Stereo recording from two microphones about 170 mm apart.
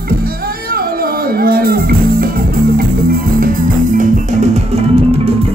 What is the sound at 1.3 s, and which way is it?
Music, 60° right (ahead or behind).